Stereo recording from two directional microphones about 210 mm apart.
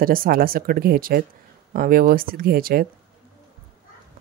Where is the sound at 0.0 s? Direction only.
45° right (ahead or behind).